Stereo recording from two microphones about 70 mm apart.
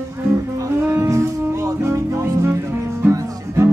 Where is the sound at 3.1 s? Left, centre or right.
Right.